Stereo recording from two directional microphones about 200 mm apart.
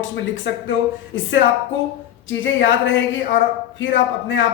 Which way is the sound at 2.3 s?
70° left (ahead or behind).